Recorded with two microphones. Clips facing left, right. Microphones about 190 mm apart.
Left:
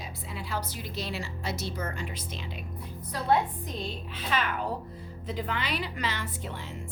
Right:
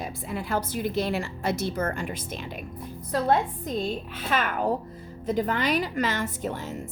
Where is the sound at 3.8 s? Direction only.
50° right (ahead or behind).